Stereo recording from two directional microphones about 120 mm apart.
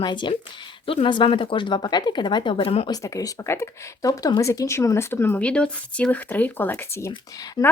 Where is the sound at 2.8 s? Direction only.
30° left (ahead or behind).